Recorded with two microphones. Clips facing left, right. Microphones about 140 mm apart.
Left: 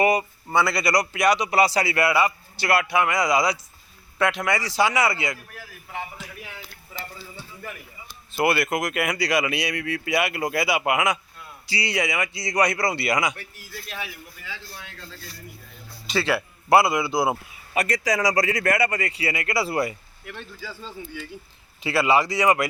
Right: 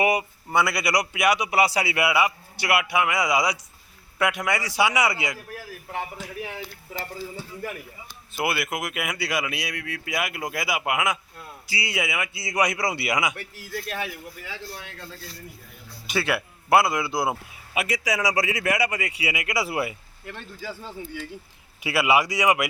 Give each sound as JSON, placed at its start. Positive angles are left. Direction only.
{"t": 0.0, "sound": "a man's voice", "side_deg": -10}
{"t": 8.3, "sound": "a man's voice", "side_deg": -5}
{"t": 13.8, "sound": "a man's voice", "side_deg": -50}
{"t": 16.0, "sound": "speech", "side_deg": -10}
{"t": 16.7, "sound": "a man's voice", "side_deg": 5}
{"t": 20.2, "sound": "a man's voice", "side_deg": -20}